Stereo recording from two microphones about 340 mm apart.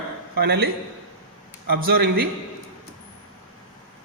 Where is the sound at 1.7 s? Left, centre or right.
Right.